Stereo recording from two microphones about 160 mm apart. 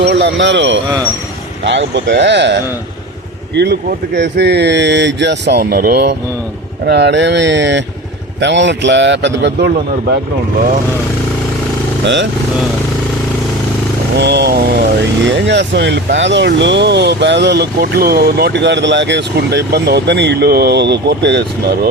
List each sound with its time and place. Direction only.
0.0 s speech: 90° right
12.0 s speech: 90° right
14.2 s speech: 90° right